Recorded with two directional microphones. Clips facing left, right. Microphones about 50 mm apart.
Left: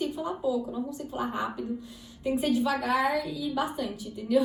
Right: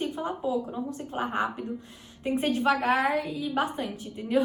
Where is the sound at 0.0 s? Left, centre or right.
Right.